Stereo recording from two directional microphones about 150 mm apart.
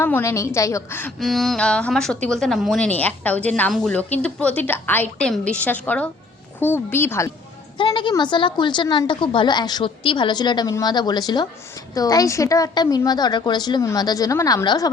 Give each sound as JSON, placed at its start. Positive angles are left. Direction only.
{"t": 0.0, "sound": "a woman's voice", "side_deg": 15}
{"t": 1.2, "sound": "a woman's voice", "side_deg": 0}
{"t": 7.8, "sound": "a woman's voice", "side_deg": 35}